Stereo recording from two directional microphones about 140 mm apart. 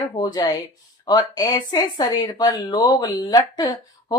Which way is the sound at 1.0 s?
30° left (ahead or behind).